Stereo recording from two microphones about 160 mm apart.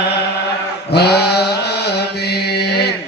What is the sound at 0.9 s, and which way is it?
Mantra, 90° left.